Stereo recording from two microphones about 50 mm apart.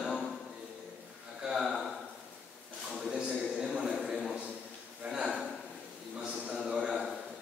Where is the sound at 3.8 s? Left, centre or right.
Centre.